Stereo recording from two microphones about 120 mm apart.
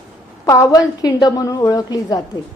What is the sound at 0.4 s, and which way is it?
A woman's voice, 30° left (ahead or behind).